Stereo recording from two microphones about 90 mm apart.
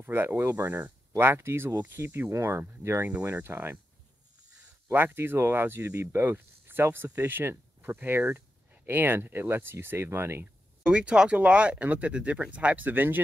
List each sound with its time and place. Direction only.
0.0 s speech: 20° right (ahead or behind)
4.9 s speech: 25° right (ahead or behind)
10.9 s speech: 10° right (ahead or behind)